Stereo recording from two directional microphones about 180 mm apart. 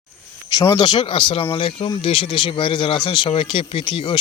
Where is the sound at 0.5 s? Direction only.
20° left (ahead or behind).